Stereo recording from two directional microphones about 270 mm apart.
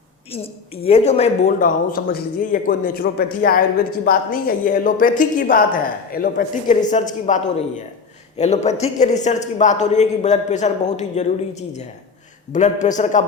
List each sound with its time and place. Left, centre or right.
0.3 s a man's voice: left
12.5 s speech: left